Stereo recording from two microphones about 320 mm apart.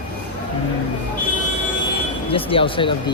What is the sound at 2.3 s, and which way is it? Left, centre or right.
Speech, centre.